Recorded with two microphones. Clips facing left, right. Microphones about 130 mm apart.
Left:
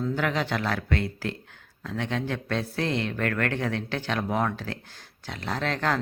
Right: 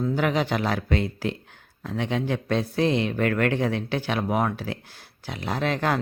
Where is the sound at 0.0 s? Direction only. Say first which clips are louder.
Right 3 dB; 15° right (ahead or behind).